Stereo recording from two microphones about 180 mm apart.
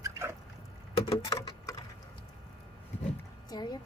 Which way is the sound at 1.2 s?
20° left (ahead or behind).